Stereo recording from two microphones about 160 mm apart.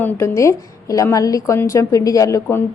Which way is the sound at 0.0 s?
15° left (ahead or behind).